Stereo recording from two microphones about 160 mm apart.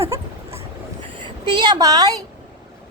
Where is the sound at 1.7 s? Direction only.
20° right (ahead or behind).